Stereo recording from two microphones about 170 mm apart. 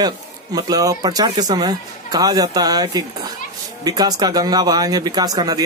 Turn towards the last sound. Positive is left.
turn(degrees=-20)  # may be behind; listen again after turning